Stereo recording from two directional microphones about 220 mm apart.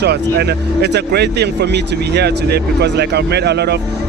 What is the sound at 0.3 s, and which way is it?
Speech, 50° right (ahead or behind).